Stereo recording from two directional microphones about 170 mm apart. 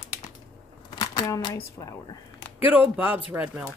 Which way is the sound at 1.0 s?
25° left (ahead or behind).